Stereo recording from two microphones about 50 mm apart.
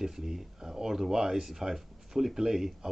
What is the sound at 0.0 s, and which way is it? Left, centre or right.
Speech, centre.